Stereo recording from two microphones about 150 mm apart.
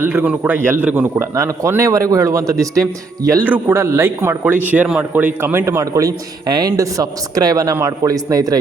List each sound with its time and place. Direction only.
0.0 s a man's voice: 10° right (ahead or behind)